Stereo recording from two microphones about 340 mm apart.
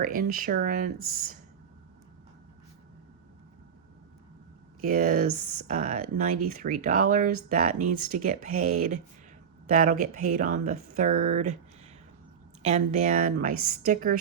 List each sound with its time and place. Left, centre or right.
0.0 s speech: right
4.8 s speech: right
12.6 s speech: right